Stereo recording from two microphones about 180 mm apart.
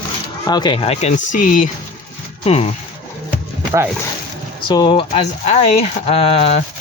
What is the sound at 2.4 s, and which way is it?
Speech, 35° left (ahead or behind).